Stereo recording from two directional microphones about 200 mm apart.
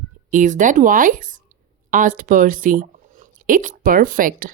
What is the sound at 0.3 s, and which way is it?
A woman's voice, 40° right (ahead or behind).